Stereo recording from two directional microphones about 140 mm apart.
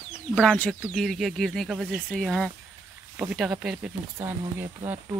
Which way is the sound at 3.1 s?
5° right (ahead or behind).